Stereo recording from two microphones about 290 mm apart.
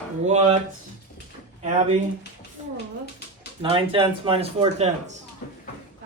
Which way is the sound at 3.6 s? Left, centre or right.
Centre.